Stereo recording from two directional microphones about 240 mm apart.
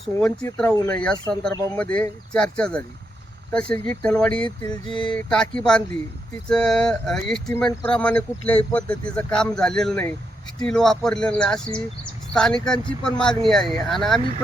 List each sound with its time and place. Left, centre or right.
0.0 s speech: centre
4.4 s music: centre
4.9 s speech: centre